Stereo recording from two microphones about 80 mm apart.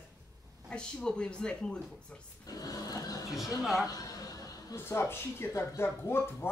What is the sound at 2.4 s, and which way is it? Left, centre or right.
Speech, left.